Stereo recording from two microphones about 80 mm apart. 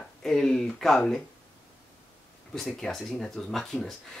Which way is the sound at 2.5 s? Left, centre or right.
Centre.